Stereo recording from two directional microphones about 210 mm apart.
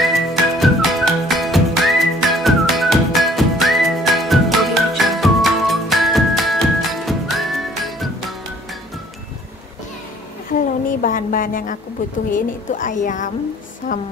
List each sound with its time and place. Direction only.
0.0 s music: centre (ahead or behind)
10.9 s a sound: 40° left (ahead or behind)
12.3 s a woman's voice: 40° left (ahead or behind)